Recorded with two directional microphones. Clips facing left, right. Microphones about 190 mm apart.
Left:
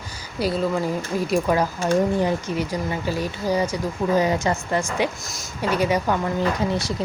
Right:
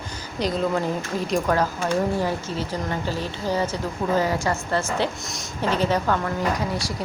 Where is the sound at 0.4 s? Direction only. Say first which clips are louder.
Left 1 dB; 5° left (ahead or behind).